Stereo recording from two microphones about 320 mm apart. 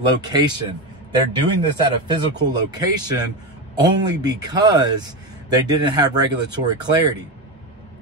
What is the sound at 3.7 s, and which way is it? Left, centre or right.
A man's voice, centre.